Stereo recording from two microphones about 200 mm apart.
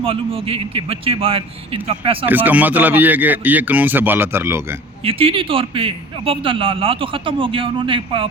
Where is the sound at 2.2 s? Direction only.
10° right (ahead or behind).